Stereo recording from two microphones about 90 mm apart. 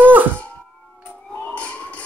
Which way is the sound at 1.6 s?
15° left (ahead or behind).